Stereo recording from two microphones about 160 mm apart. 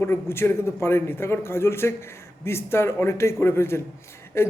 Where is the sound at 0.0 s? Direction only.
15° left (ahead or behind).